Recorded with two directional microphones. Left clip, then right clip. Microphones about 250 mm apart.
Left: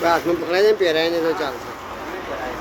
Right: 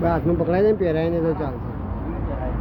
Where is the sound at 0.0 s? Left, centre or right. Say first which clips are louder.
Left 3 dB; centre.